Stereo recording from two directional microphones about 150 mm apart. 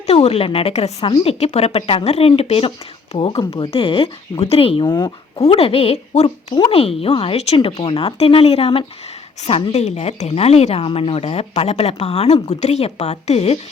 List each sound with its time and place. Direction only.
0.1 s a woman's voice: 45° left (ahead or behind)